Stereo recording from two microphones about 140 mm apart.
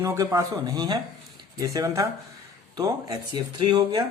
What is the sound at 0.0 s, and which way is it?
Speech, 25° right (ahead or behind).